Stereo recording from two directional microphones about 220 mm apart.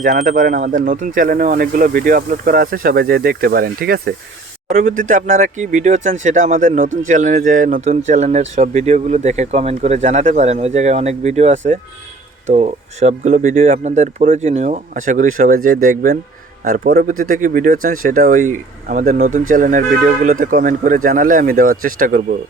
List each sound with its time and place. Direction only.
0.0 s speech: 35° right (ahead or behind)